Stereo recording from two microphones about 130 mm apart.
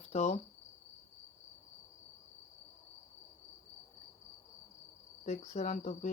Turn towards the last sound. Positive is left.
turn(degrees=65)  # may be behind; listen again after turning